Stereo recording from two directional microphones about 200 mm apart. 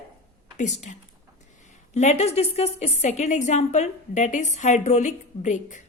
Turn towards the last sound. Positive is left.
turn(degrees=40)  # may be behind; listen again after turning